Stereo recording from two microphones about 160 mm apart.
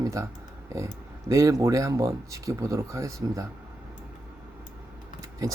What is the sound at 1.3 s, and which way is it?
Speech, 20° right (ahead or behind).